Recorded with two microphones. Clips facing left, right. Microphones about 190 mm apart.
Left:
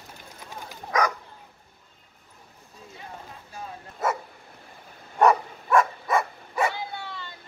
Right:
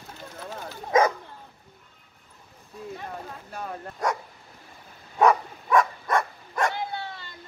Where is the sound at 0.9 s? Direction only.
25° right (ahead or behind).